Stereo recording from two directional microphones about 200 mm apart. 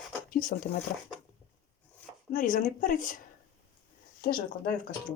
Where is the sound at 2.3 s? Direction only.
40° left (ahead or behind).